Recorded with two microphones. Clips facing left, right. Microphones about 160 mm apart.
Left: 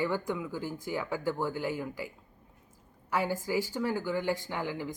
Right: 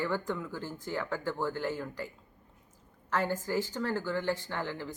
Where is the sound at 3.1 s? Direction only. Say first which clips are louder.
Left 1 dB; 10° left (ahead or behind).